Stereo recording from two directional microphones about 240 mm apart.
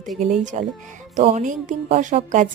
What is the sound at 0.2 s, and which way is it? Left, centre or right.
A woman's voice, right.